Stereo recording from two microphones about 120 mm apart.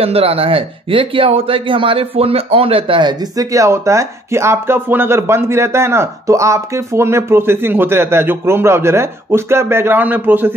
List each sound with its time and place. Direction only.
0.0 s speech: 55° right (ahead or behind); by 10.5 s 15° right (ahead or behind)